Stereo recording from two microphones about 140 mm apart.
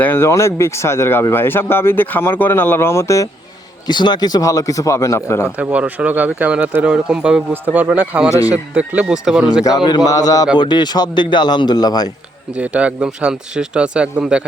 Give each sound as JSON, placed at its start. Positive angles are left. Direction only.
{"t": 0.0, "sound": "speech", "side_deg": 15}
{"t": 3.8, "sound": "a man's voice", "side_deg": 30}
{"t": 5.7, "sound": "speech", "side_deg": -10}
{"t": 9.6, "sound": "a man's voice", "side_deg": 30}
{"t": 12.5, "sound": "speech", "side_deg": -10}